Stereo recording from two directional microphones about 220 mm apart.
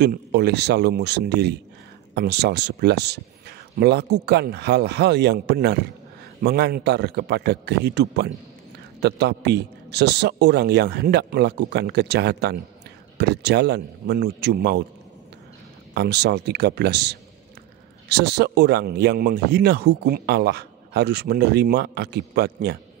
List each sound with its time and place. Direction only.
0.0 s a man's voice: 45° right (ahead or behind)
15.9 s a man's voice: 50° right (ahead or behind)